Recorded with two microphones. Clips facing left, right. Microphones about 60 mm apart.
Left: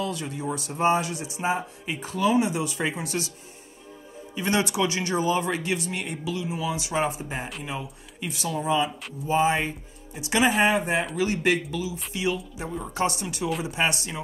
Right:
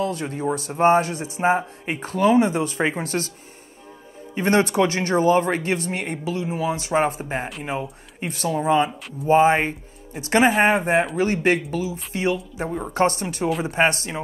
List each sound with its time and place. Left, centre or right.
0.0 s speech: right
4.4 s speech: right